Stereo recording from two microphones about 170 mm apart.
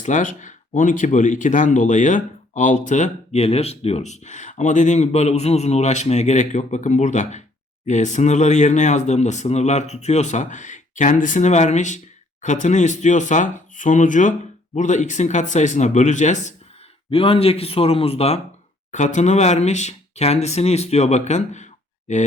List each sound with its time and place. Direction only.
0.0 s speech: 50° left (ahead or behind)
17.1 s speech: 35° left (ahead or behind)